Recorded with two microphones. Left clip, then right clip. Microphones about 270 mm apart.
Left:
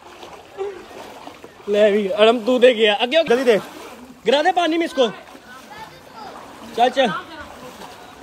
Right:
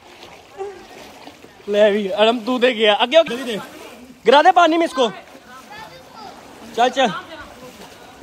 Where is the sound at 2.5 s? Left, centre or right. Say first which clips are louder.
Left 4 dB; right.